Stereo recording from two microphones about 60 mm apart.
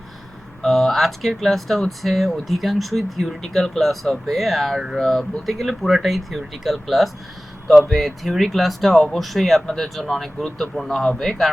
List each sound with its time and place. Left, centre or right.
0.6 s speech: centre